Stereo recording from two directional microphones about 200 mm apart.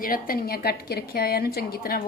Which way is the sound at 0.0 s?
45° left (ahead or behind).